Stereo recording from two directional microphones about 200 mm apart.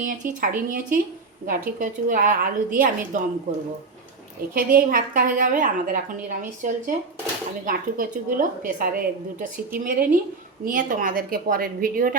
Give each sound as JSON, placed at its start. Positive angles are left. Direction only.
{"t": 0.0, "sound": "a woman's voice", "side_deg": -40}
{"t": 4.5, "sound": "a woman's voice", "side_deg": -45}